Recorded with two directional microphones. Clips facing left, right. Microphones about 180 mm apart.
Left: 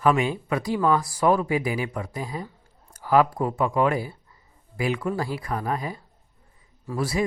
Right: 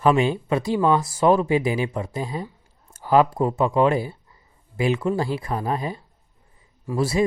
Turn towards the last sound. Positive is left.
turn(degrees=-25)  # may be behind; listen again after turning